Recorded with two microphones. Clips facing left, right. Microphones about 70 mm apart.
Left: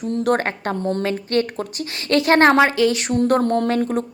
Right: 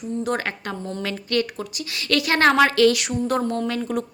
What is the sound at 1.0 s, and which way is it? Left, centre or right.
A woman's voice, left.